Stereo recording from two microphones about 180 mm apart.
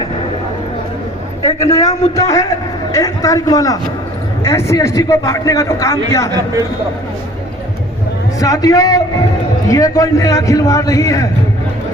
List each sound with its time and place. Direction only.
1.5 s a man's voice: 20° left (ahead or behind)
6.3 s speech: 20° right (ahead or behind)
8.4 s a man's voice: 20° left (ahead or behind)